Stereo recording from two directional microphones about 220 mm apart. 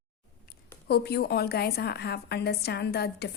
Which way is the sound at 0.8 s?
50° left (ahead or behind).